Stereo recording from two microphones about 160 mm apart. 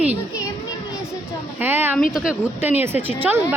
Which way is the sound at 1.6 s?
10° right (ahead or behind).